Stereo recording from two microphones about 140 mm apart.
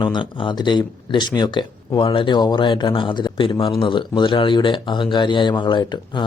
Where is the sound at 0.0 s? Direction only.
35° left (ahead or behind).